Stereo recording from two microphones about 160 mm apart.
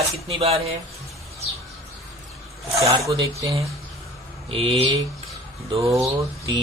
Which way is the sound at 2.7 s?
20° right (ahead or behind).